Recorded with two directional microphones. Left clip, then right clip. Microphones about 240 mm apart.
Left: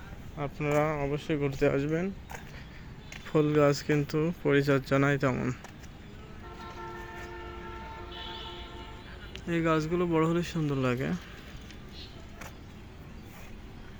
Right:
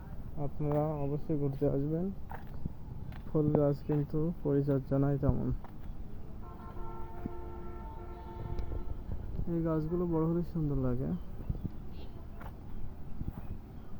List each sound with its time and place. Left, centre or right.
0.3 s speech: centre; by 5.5 s left
9.5 s speech: left